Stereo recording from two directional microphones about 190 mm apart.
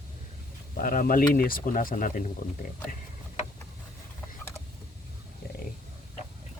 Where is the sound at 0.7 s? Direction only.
45° left (ahead or behind).